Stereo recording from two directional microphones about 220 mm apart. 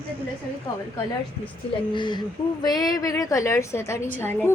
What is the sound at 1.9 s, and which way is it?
A woman's voice, 20° left (ahead or behind).